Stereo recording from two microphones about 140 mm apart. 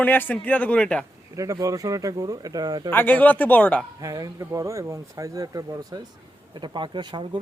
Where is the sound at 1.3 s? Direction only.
25° right (ahead or behind).